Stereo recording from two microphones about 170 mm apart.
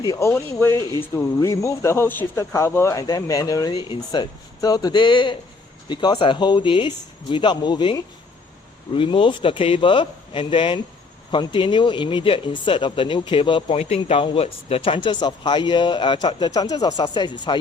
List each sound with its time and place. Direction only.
0.0 s speech: 20° left (ahead or behind)